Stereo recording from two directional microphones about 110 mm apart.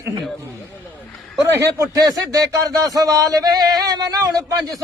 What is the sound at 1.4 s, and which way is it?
A man's voice, 25° right (ahead or behind).